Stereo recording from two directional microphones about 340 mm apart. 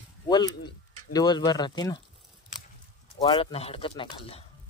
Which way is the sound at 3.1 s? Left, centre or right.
Centre.